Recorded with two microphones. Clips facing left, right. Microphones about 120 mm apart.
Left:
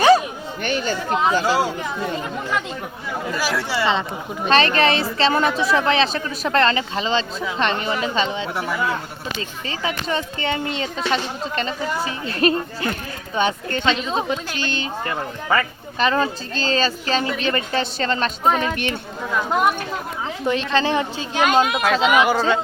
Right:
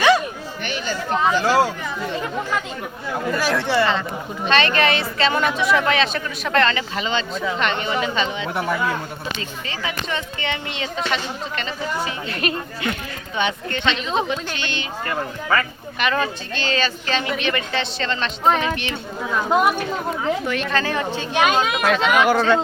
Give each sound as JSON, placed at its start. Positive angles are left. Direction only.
{"t": 0.6, "sound": "chatter", "side_deg": 45}
{"t": 1.1, "sound": "speech", "side_deg": 15}
{"t": 3.3, "sound": "speech", "side_deg": 5}
{"t": 4.4, "sound": "a woman's voice", "side_deg": 35}
{"t": 9.6, "sound": "a woman's voice", "side_deg": 35}
{"t": 15.0, "sound": "a woman's voice", "side_deg": 20}
{"t": 19.4, "sound": "speech", "side_deg": -10}
{"t": 20.5, "sound": "a woman's voice", "side_deg": 30}
{"t": 21.4, "sound": "speech", "side_deg": 0}